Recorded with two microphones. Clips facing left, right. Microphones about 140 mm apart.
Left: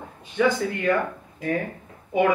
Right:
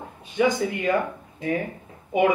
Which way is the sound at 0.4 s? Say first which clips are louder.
Even; 20° right (ahead or behind).